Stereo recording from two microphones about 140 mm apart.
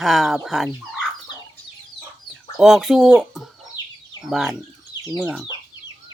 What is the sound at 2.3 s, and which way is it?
Speech, centre (ahead or behind).